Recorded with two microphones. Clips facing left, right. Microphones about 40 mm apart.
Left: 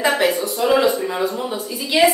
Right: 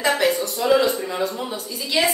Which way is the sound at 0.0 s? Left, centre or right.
Centre.